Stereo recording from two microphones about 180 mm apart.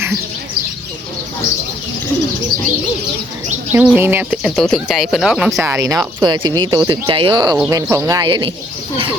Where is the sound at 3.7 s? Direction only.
10° right (ahead or behind).